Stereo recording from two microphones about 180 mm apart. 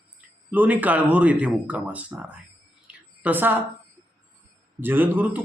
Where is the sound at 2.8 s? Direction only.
10° right (ahead or behind).